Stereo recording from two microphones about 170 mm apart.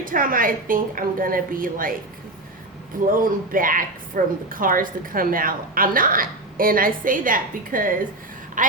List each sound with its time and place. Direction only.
0.0 s a woman's voice: 55° right (ahead or behind)
3.1 s a woman's voice: 55° right (ahead or behind)